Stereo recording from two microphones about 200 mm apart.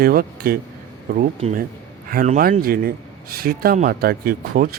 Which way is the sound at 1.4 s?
35° right (ahead or behind).